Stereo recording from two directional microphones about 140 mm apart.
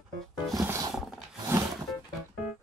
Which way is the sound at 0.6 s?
20° right (ahead or behind).